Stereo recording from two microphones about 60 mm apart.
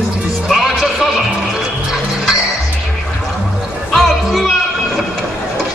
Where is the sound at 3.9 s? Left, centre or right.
Centre.